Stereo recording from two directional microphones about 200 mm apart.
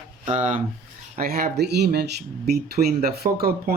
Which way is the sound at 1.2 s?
50° right (ahead or behind).